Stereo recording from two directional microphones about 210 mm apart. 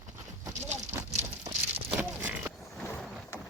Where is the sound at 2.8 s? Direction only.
5° left (ahead or behind).